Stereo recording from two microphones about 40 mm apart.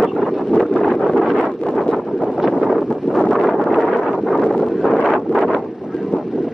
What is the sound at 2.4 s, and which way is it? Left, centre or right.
Wind noise, centre.